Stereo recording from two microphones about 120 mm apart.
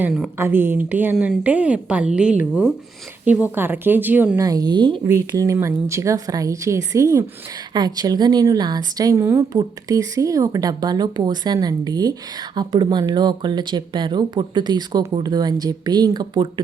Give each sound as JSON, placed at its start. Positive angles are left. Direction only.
{"t": 0.3, "sound": "speech", "side_deg": -20}
{"t": 4.4, "sound": "a woman's voice", "side_deg": -30}
{"t": 5.3, "sound": "a woman's voice", "side_deg": -25}